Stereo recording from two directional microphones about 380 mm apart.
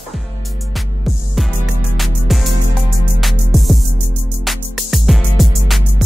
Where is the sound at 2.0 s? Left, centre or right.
Centre.